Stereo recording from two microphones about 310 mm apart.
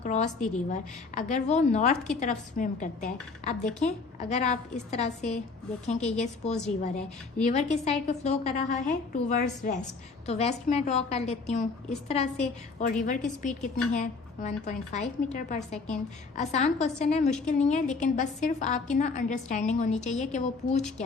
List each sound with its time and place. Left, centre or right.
0.0 s a woman's voice: left